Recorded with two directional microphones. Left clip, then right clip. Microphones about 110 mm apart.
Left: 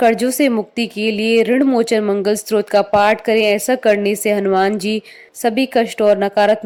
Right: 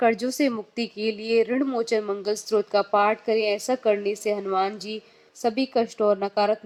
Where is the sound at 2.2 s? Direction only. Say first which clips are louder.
Left 8 dB; 60° left (ahead or behind).